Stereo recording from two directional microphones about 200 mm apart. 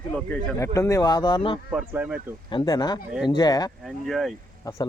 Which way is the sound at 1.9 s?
10° right (ahead or behind).